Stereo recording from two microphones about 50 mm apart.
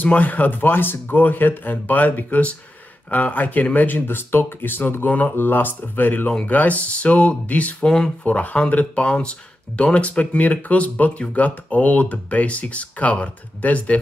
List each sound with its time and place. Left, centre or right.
0.0 s speech: left
5.3 s speech: left